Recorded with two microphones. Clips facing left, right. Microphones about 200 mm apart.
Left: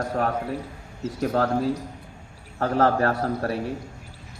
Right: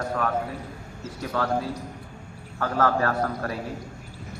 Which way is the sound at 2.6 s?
30° left (ahead or behind).